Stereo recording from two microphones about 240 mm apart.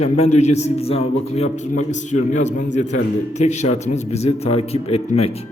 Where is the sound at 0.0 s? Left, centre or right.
Left.